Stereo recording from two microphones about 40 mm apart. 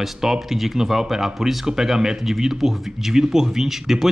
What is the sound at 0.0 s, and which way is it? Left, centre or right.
Speech, centre.